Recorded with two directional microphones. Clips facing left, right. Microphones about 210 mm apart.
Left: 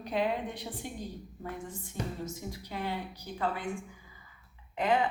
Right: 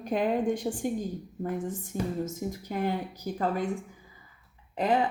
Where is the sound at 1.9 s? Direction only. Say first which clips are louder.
Right 6 dB; 45° right (ahead or behind).